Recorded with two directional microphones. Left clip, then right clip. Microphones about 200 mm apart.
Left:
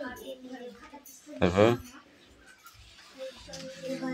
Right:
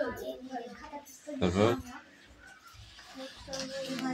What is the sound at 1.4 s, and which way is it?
Speech, 35° left (ahead or behind).